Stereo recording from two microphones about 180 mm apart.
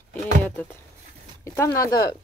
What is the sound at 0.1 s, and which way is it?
Speech, 10° left (ahead or behind).